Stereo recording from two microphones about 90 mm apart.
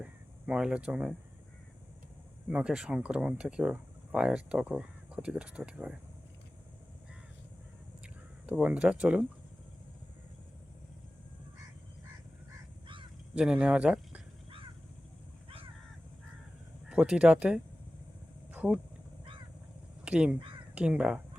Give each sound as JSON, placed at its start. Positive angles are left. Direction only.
{"t": 0.0, "sound": "speech", "side_deg": -10}
{"t": 2.5, "sound": "speech", "side_deg": -10}
{"t": 8.0, "sound": "a sound", "side_deg": -15}
{"t": 13.3, "sound": "speech", "side_deg": -10}
{"t": 15.4, "sound": "crow", "side_deg": -90}
{"t": 16.9, "sound": "speech", "side_deg": -10}
{"t": 18.5, "sound": "vehicle", "side_deg": -15}
{"t": 20.1, "sound": "speech", "side_deg": -10}